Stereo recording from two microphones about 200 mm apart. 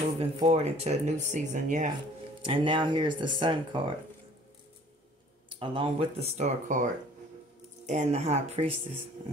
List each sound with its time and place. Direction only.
0.2 s speech: 30° right (ahead or behind)
2.4 s speech: 25° right (ahead or behind)
5.6 s speech: 25° right (ahead or behind)